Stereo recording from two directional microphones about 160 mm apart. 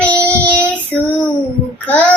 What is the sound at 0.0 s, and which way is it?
Child singing, 10° left (ahead or behind).